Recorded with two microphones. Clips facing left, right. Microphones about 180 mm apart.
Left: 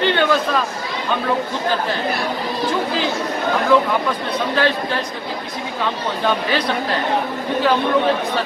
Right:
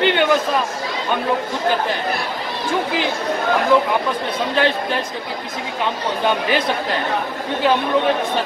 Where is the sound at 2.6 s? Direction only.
15° right (ahead or behind).